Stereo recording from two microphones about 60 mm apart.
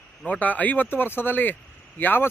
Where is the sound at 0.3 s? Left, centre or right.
Left.